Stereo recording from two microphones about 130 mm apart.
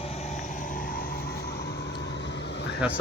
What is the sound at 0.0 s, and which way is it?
Vehicle, 55° left (ahead or behind).